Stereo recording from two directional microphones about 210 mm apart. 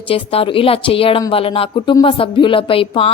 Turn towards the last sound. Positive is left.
turn(degrees=25)  # may be behind; listen again after turning